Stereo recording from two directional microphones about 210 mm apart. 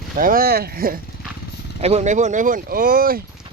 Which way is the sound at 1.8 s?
30° right (ahead or behind).